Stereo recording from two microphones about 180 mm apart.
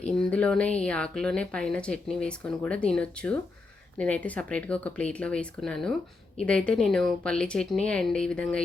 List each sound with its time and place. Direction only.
0.0 s speech: 5° left (ahead or behind)